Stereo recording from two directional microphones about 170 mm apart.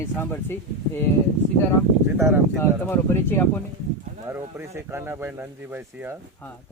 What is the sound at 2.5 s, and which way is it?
Speech, 15° left (ahead or behind).